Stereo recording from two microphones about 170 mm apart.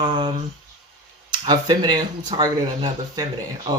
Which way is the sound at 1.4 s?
25° right (ahead or behind).